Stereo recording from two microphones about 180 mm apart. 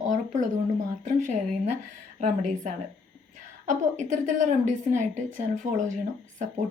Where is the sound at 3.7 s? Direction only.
45° right (ahead or behind).